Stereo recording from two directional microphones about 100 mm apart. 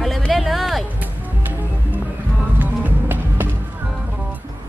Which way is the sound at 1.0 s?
15° right (ahead or behind).